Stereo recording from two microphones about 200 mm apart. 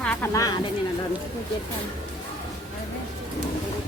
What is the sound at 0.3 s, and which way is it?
Speech, 20° left (ahead or behind).